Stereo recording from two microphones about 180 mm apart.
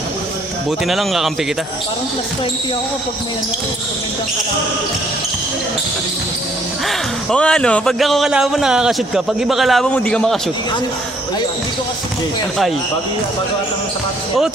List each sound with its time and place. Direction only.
0.9 s speech: centre (ahead or behind)
6.8 s speech: 5° left (ahead or behind)